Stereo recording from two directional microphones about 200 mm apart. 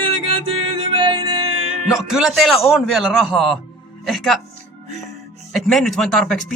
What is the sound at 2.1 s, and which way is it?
Speech, 5° right (ahead or behind).